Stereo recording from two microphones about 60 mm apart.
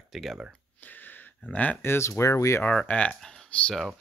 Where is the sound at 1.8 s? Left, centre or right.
Left.